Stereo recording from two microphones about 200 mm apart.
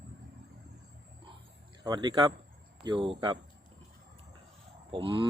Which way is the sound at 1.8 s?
20° right (ahead or behind).